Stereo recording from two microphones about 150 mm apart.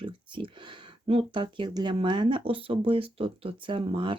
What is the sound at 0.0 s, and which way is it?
Speech, 35° right (ahead or behind).